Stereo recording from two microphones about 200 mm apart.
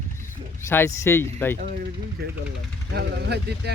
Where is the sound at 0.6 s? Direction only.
15° left (ahead or behind).